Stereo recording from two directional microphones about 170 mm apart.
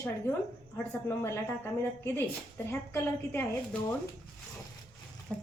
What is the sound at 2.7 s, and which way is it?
A woman's voice, 15° left (ahead or behind).